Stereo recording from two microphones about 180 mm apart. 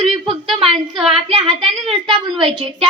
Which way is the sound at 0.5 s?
30° right (ahead or behind).